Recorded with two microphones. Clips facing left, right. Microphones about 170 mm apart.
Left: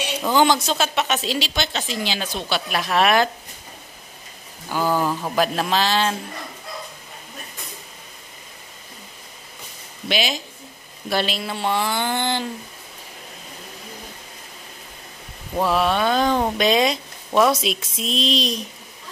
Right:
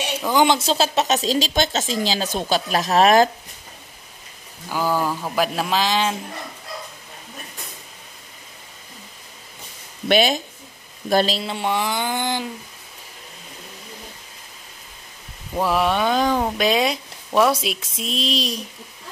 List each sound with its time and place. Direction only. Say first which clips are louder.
0.3 s speech: even; 15° right (ahead or behind)
0.7 s speech: right 3 dB; 30° right (ahead or behind)
4.6 s speech: left 1 dB; 10° right (ahead or behind)
10.0 s speech: right 6 dB; 50° right (ahead or behind)
11.1 s speech: right 4 dB; 40° right (ahead or behind)
11.4 s speech: even; 15° right (ahead or behind)
15.6 s speech: even; 15° right (ahead or behind)